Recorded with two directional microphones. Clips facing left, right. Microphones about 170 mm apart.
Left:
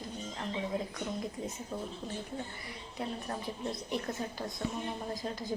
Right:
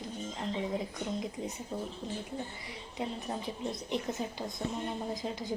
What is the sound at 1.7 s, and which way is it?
Speech, 15° right (ahead or behind).